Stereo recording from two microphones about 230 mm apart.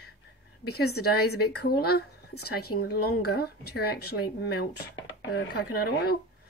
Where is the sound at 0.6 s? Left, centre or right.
Left.